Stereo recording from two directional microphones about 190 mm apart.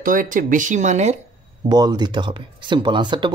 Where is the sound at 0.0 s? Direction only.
45° right (ahead or behind).